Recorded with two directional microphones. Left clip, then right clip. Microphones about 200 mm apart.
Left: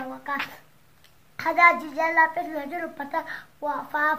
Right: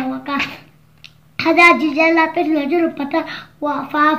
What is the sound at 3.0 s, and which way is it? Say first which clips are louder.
A child's voice: right 9 dB; 20° left (ahead or behind).